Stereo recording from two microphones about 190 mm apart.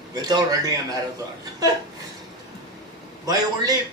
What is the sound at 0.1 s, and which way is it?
Speech, 20° right (ahead or behind).